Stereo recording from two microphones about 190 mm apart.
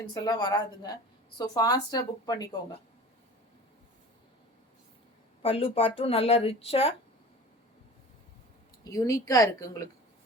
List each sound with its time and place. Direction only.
0.1 s speech: 20° left (ahead or behind)
5.4 s speech: 30° left (ahead or behind)
8.8 s a woman's voice: 15° left (ahead or behind)